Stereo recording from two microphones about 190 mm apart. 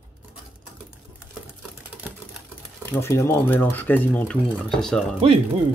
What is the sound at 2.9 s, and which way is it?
Speech, 15° left (ahead or behind).